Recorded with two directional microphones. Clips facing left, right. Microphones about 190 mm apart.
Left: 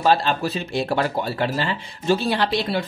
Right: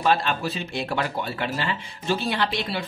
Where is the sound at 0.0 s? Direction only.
35° left (ahead or behind).